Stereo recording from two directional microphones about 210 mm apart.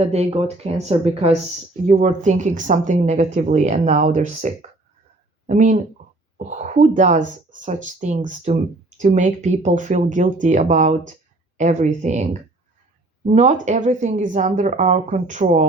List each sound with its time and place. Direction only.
0.0 s a woman's voice: 30° right (ahead or behind)